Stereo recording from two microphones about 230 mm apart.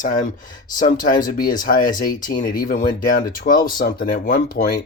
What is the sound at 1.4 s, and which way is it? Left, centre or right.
Speech, left.